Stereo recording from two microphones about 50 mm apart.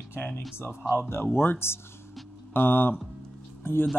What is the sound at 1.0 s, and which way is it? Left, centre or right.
A man's voice, left.